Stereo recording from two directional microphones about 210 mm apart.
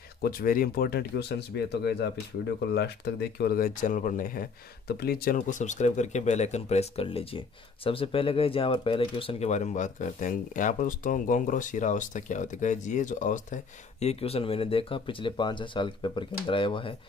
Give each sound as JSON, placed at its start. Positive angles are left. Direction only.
{"t": 0.2, "sound": "speech", "side_deg": 45}
{"t": 3.3, "sound": "speech", "side_deg": 45}